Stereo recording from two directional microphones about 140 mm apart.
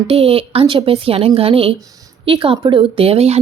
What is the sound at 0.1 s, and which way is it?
Speech, 45° right (ahead or behind).